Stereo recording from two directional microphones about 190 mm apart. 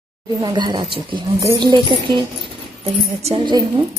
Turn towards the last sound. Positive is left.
turn(degrees=-25)  # may be behind; listen again after turning